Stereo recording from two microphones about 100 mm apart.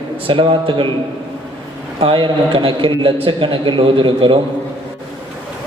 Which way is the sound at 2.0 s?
60° right (ahead or behind).